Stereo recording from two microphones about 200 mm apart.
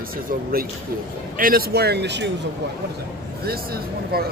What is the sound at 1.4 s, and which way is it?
Speech, 45° right (ahead or behind).